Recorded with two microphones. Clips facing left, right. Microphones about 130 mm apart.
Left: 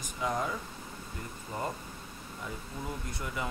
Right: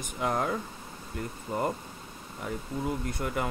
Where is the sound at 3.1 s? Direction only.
55° right (ahead or behind).